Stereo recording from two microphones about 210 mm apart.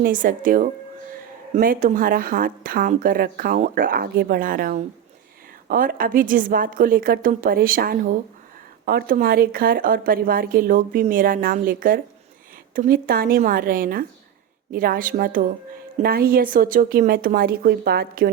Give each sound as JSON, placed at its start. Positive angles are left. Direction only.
{"t": 0.0, "sound": "a woman's voice", "side_deg": -40}